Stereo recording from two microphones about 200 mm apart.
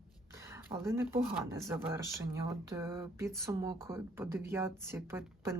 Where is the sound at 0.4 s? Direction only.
10° right (ahead or behind).